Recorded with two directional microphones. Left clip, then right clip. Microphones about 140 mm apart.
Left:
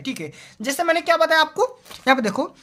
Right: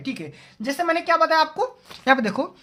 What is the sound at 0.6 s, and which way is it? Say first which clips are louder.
A woman's voice: left 2 dB; 60° left (ahead or behind).